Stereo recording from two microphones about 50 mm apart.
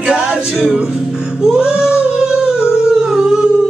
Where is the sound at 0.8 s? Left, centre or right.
Right.